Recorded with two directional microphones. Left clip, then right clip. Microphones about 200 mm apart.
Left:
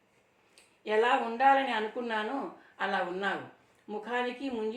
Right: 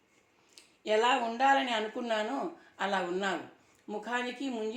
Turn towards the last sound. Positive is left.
turn(degrees=-50)  # may be behind; listen again after turning